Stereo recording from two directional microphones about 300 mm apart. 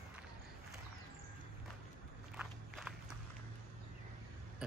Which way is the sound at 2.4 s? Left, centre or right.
Centre.